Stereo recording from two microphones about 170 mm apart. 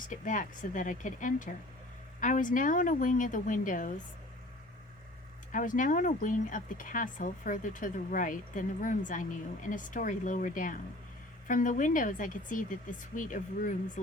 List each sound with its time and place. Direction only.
0.1 s speech: 50° left (ahead or behind)
5.5 s speech: 50° left (ahead or behind)